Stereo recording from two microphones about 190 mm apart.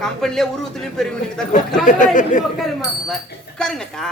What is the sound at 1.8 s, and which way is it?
Speech, 45° left (ahead or behind).